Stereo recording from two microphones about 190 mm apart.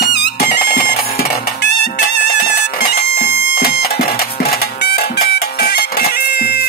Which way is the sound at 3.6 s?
55° left (ahead or behind).